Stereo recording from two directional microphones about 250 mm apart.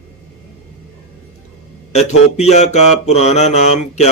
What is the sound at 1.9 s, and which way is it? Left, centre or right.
Speech, left.